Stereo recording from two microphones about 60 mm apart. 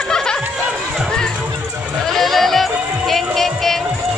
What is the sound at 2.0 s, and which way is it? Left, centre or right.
Music, centre.